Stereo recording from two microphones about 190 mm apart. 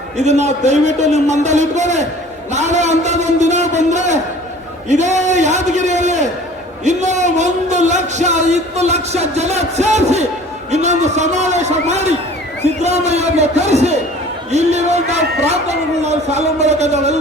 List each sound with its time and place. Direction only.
0.3 s a man's voice: 35° right (ahead or behind)